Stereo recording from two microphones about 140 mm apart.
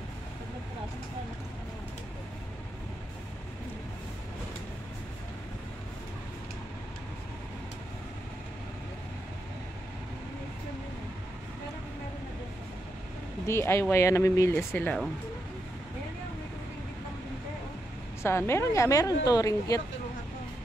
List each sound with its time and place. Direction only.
13.5 s speech: 20° left (ahead or behind)
18.2 s speech: 20° left (ahead or behind)